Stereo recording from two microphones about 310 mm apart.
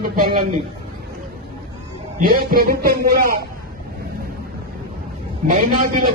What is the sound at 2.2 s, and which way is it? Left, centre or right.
Speech, right.